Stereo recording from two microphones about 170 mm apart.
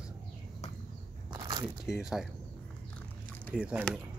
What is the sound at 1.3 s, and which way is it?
Biting, 25° right (ahead or behind).